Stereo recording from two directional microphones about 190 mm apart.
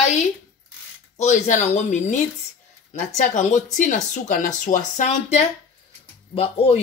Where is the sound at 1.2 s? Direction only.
35° left (ahead or behind).